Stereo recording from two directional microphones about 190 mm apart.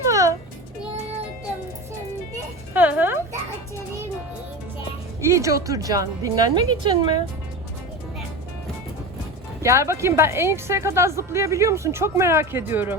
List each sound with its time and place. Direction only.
0.1 s music: 15° right (ahead or behind)
2.3 s music: 10° right (ahead or behind)
5.2 s a woman's voice: 15° right (ahead or behind)
9.6 s a woman's voice: 15° right (ahead or behind)